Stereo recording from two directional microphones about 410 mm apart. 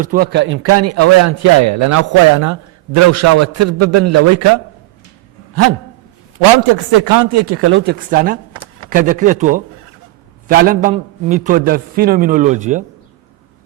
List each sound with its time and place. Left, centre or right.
0.0 s a man's voice: right
6.9 s speech: right
7.4 s a man's voice: right